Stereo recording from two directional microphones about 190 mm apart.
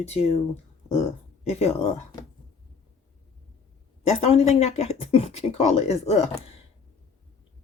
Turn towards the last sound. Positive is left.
turn(degrees=35)  # may be behind; listen again after turning